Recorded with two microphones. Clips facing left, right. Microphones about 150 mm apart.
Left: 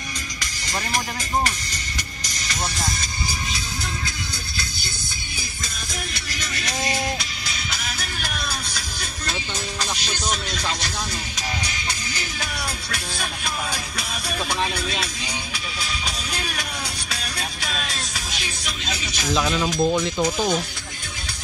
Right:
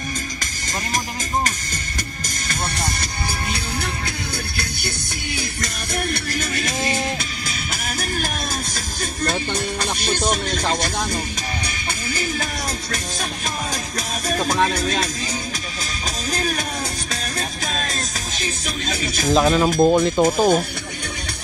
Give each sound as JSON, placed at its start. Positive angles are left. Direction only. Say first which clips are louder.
{"t": 2.2, "sound": "music", "louder": "right 1 dB", "side_deg": -55}
{"t": 6.1, "sound": "music", "louder": "right 7 dB", "side_deg": -50}
{"t": 13.9, "sound": "music", "louder": "right 5 dB", "side_deg": -45}
{"t": 16.3, "sound": "music", "louder": "right 6 dB", "side_deg": -40}